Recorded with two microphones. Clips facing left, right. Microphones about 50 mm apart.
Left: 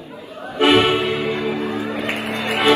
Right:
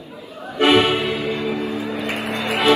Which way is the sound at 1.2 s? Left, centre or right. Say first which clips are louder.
Left 1 dB; left.